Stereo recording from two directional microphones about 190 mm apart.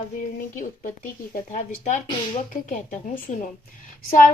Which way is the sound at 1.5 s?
35° left (ahead or behind).